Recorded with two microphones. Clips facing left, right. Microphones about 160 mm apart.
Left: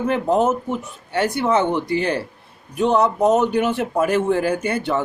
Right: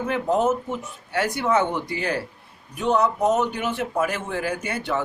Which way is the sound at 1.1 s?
30° left (ahead or behind).